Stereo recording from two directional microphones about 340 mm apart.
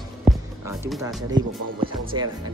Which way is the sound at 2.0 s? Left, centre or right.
Centre.